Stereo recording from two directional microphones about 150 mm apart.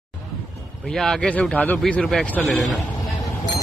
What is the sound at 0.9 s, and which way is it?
A man's voice, 5° left (ahead or behind).